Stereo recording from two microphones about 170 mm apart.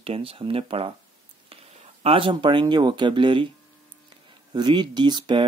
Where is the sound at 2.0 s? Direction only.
30° right (ahead or behind).